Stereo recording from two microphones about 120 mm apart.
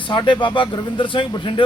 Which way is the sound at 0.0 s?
40° left (ahead or behind).